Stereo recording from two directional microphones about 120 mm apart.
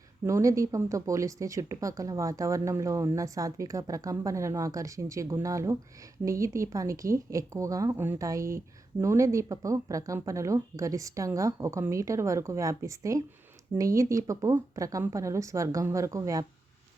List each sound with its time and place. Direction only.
0.3 s speech: 25° right (ahead or behind)
7.9 s speech: 15° right (ahead or behind)